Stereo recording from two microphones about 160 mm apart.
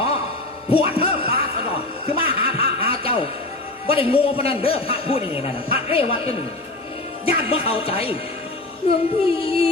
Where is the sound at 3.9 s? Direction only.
35° left (ahead or behind).